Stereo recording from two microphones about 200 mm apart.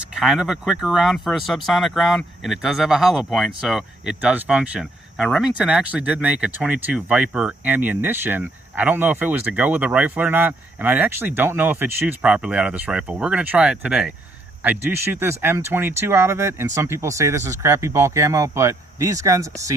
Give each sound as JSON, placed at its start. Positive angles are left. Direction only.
{"t": 0.0, "sound": "speech", "side_deg": 0}